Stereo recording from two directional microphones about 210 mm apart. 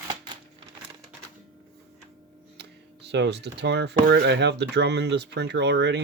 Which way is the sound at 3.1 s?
55° right (ahead or behind).